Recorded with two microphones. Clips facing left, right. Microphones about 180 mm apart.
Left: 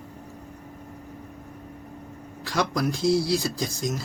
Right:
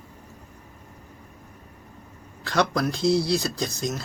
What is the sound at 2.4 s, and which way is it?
Speech, 10° left (ahead or behind).